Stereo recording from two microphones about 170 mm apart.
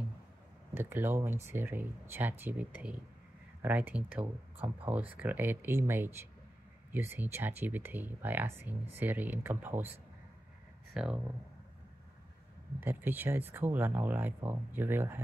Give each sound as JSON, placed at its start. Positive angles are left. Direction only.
{"t": 0.7, "sound": "speech", "side_deg": -10}
{"t": 12.8, "sound": "speech", "side_deg": -10}